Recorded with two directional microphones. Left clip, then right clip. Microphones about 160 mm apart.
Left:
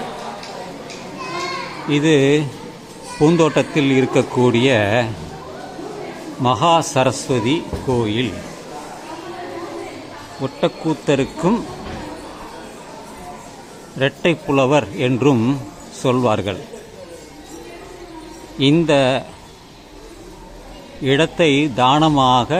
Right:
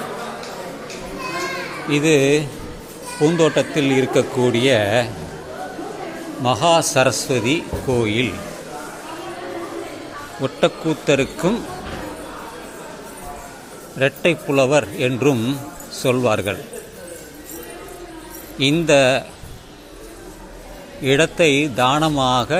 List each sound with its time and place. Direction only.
1.9 s a man's voice: 10° left (ahead or behind)
6.4 s a man's voice: 10° left (ahead or behind)
10.8 s a man's voice: 10° left (ahead or behind)
14.0 s a man's voice: 10° left (ahead or behind)
18.6 s speech: 5° left (ahead or behind)
21.0 s a man's voice: 5° left (ahead or behind)